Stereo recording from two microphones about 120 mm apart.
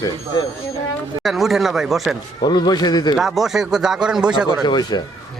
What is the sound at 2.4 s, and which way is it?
Speech, 35° left (ahead or behind).